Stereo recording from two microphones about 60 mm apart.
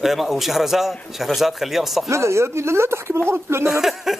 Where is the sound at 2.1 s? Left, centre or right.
Right.